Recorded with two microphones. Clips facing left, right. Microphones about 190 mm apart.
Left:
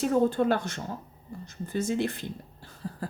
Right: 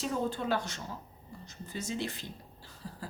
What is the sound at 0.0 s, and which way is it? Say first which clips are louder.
Speech: left 9 dB; 55° left (ahead or behind).